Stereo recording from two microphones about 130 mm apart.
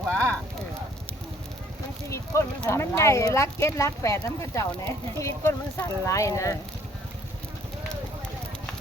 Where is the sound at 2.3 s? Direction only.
20° left (ahead or behind).